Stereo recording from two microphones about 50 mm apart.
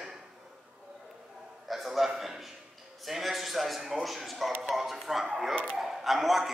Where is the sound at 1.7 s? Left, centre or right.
Centre.